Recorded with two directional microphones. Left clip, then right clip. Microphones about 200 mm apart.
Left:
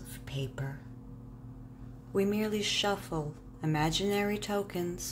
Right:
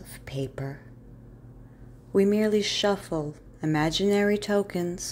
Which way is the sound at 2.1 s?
30° right (ahead or behind).